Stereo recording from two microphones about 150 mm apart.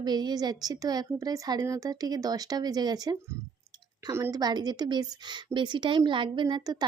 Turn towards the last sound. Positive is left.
turn(degrees=-30)  # may be behind; listen again after turning